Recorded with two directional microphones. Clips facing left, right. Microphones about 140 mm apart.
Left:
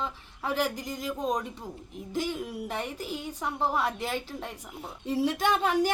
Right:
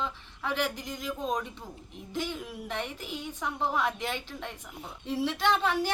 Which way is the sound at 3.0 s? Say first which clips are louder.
Left 3 dB; 40° left (ahead or behind).